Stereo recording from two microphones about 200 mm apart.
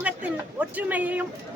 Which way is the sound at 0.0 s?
5° right (ahead or behind).